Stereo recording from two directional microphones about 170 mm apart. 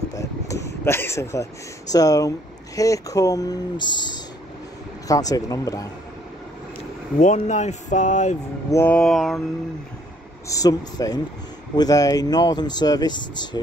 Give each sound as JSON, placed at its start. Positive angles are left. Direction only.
{"t": 0.1, "sound": "speech", "side_deg": 20}
{"t": 7.2, "sound": "speech", "side_deg": 45}
{"t": 8.6, "sound": "a sound", "side_deg": 15}
{"t": 10.5, "sound": "speech", "side_deg": 20}